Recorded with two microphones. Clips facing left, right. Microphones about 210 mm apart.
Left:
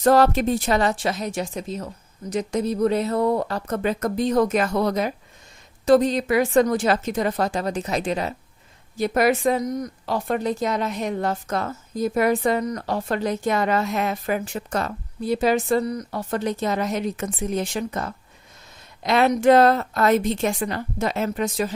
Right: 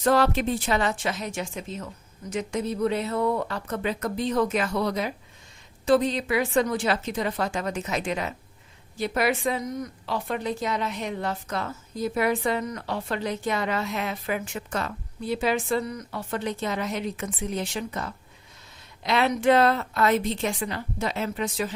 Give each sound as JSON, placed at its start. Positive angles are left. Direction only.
{"t": 0.0, "sound": "speech", "side_deg": 40}